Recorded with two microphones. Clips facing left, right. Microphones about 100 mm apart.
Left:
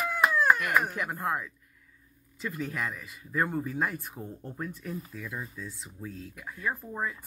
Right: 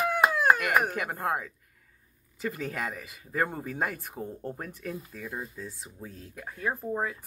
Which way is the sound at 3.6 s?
65° right (ahead or behind).